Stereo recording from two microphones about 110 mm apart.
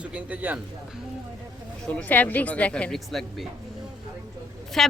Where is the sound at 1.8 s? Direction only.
15° left (ahead or behind).